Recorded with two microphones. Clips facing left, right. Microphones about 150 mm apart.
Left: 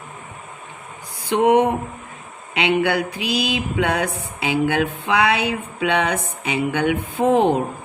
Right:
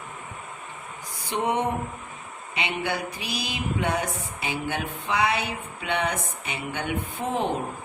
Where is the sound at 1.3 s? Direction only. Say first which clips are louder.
Left 10 dB; 90° left.